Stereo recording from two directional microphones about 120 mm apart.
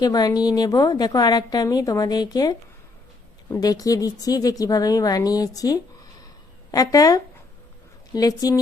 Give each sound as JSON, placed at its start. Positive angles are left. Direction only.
{"t": 0.0, "sound": "a woman's voice", "side_deg": 30}